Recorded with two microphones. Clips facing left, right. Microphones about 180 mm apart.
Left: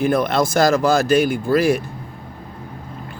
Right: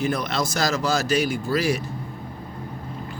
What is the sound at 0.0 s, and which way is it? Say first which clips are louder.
Speech: left 7 dB; 55° left (ahead or behind).